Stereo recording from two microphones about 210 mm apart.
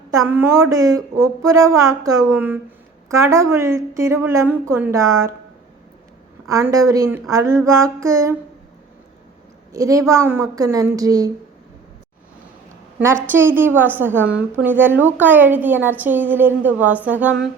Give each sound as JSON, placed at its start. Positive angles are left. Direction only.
{"t": 0.1, "sound": "a woman's voice", "side_deg": -15}
{"t": 6.5, "sound": "a woman's voice", "side_deg": -15}
{"t": 9.7, "sound": "a woman's voice", "side_deg": -15}
{"t": 13.2, "sound": "a woman's voice", "side_deg": -10}